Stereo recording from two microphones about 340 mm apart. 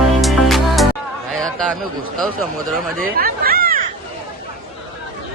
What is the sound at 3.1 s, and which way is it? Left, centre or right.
Chatter, right.